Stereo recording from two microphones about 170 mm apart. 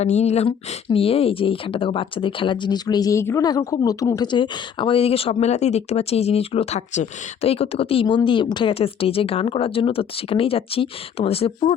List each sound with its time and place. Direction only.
0.0 s speech: 40° left (ahead or behind)